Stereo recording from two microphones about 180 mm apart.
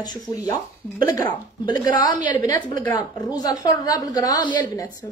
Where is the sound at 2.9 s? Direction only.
25° left (ahead or behind).